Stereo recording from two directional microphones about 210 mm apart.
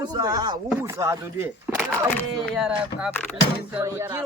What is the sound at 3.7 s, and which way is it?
Speech, 10° right (ahead or behind).